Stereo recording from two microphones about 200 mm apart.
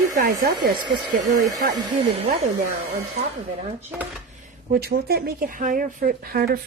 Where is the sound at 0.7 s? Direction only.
20° right (ahead or behind).